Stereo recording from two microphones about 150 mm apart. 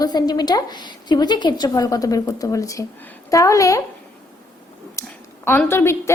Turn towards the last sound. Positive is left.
turn(degrees=15)  # may be behind; listen again after turning